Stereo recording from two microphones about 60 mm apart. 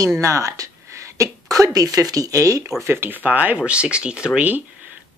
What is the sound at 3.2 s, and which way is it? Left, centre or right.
Speech, right.